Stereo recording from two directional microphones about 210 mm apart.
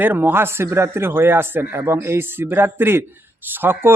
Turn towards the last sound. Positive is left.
turn(degrees=-10)  # may be behind; listen again after turning